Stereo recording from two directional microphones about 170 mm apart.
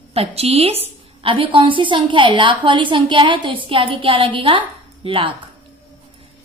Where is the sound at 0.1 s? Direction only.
35° right (ahead or behind).